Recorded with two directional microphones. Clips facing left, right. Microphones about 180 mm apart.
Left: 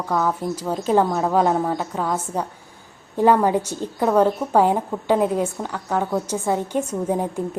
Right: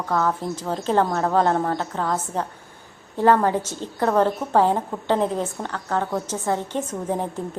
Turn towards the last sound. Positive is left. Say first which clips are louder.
# left 3 dB
turn(degrees=10)  # may be behind; listen again after turning